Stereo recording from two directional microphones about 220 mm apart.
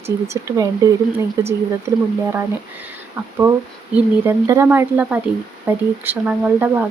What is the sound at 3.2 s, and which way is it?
Speech, 5° right (ahead or behind).